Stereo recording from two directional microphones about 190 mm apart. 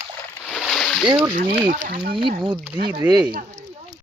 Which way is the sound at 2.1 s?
25° right (ahead or behind).